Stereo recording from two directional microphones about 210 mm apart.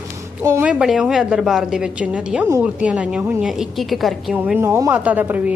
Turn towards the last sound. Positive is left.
turn(degrees=-10)  # may be behind; listen again after turning